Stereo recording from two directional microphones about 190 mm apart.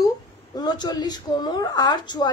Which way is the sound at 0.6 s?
20° left (ahead or behind).